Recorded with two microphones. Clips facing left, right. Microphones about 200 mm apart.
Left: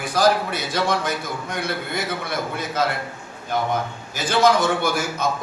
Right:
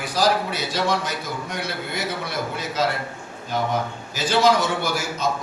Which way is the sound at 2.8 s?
55° left (ahead or behind).